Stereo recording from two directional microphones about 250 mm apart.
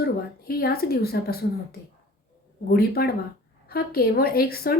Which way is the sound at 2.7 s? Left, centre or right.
Left.